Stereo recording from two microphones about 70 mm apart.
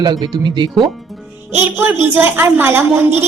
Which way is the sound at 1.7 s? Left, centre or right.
Right.